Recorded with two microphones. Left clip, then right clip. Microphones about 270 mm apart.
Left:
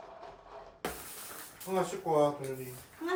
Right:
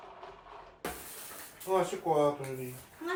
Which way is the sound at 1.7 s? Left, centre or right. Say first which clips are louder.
Right 3 dB; right.